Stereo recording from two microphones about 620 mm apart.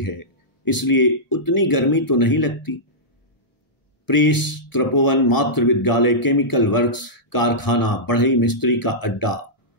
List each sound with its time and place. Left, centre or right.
0.0 s speech: left
4.0 s speech: left